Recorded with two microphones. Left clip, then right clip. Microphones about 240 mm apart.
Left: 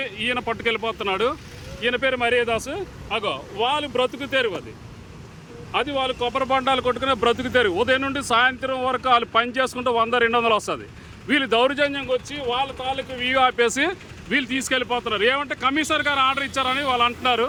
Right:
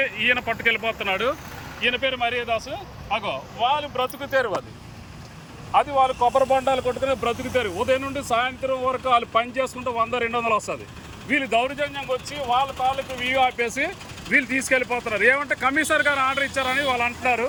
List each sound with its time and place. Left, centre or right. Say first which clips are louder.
0.0 s speech: right 4 dB; centre
5.7 s speech: right 4 dB; centre